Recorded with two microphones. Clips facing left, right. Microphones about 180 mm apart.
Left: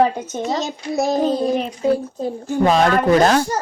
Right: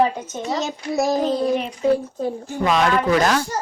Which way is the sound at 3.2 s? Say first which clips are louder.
Left 4 dB; 30° left (ahead or behind).